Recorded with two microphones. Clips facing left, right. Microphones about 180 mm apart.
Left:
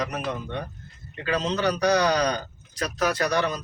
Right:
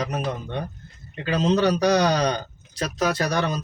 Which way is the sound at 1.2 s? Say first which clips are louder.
Right 4 dB; 30° right (ahead or behind).